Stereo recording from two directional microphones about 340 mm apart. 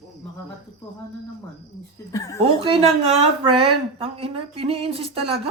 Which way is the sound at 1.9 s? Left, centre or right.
Centre.